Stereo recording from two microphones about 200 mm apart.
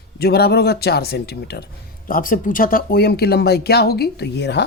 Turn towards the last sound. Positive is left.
turn(degrees=55)  # may be behind; listen again after turning